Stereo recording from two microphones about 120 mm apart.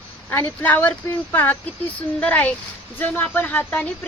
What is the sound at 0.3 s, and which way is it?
Speech, 15° left (ahead or behind).